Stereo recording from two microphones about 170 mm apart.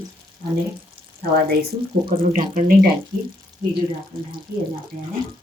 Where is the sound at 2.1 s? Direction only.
55° right (ahead or behind).